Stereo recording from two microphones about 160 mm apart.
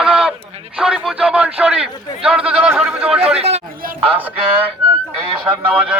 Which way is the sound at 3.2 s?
40° right (ahead or behind).